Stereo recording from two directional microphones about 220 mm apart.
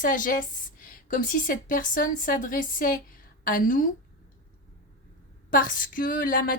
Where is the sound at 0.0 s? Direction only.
40° left (ahead or behind).